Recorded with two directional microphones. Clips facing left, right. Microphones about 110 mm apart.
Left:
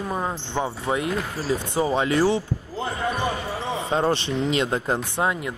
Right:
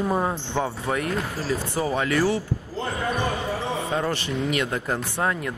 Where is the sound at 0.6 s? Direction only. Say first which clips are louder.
Left 2 dB; 15° left (ahead or behind).